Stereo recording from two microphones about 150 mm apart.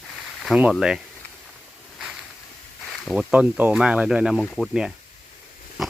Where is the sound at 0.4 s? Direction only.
5° right (ahead or behind).